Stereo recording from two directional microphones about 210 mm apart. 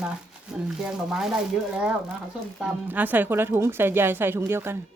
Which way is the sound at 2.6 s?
10° right (ahead or behind).